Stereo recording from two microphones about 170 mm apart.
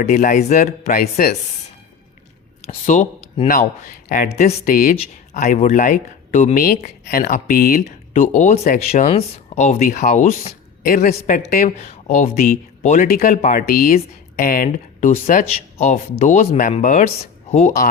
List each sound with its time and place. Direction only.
0.1 s speech: 50° left (ahead or behind)
2.6 s speech: 45° left (ahead or behind)
4.3 s speech: 40° left (ahead or behind)